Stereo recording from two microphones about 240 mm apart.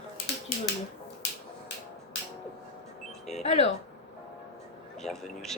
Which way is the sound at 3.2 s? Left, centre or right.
Left.